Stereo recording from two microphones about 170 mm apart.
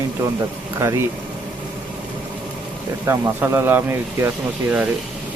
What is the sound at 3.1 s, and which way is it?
Speech, 15° right (ahead or behind).